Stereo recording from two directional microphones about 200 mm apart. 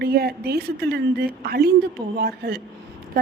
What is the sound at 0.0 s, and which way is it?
A woman's voice, 50° right (ahead or behind).